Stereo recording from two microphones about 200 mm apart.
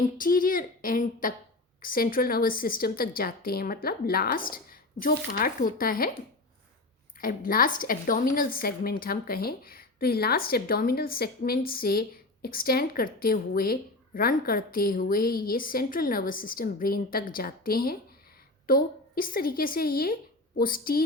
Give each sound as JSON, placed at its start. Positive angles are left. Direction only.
{"t": 0.2, "sound": "a woman's voice", "side_deg": 45}
{"t": 7.2, "sound": "a woman's voice", "side_deg": 45}